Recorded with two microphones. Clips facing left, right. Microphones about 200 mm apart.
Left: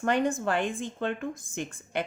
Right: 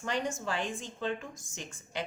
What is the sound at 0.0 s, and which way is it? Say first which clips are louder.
Speech: left 8 dB; 55° left (ahead or behind).